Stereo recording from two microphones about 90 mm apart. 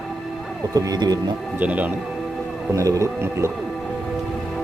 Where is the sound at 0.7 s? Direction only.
45° right (ahead or behind).